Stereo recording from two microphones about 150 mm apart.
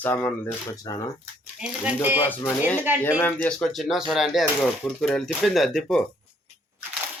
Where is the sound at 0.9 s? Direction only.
25° left (ahead or behind).